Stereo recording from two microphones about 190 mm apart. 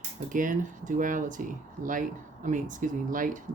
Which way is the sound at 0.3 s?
45° right (ahead or behind).